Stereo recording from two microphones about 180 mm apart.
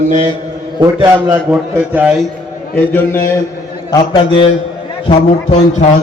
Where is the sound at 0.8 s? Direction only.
20° right (ahead or behind).